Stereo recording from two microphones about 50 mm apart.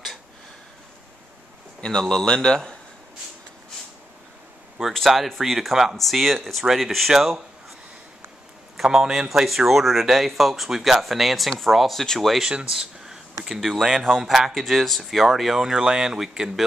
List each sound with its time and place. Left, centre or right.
1.8 s speech: centre
4.9 s speech: centre
8.8 s speech: centre
12.4 s speech: centre
13.5 s speech: centre